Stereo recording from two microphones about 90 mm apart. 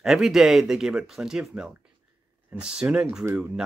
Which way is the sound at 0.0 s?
5° right (ahead or behind).